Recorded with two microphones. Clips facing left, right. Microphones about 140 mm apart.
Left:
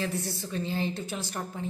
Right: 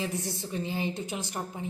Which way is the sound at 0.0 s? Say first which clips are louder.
Left 1 dB; 20° right (ahead or behind).